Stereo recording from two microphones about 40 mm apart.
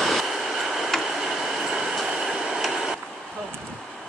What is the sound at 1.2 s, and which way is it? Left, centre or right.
Train, centre.